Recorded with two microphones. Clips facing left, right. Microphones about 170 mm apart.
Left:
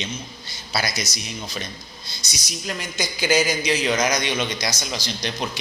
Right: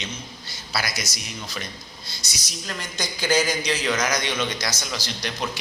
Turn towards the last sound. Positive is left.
turn(degrees=20)  # may be behind; listen again after turning